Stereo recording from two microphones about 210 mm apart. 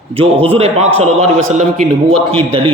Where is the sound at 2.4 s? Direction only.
25° right (ahead or behind).